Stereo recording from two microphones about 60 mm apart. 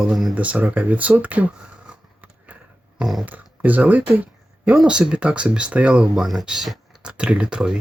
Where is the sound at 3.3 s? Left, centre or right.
Right.